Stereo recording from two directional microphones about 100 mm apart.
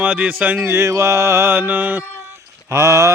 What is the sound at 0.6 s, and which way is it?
Music, 30° right (ahead or behind).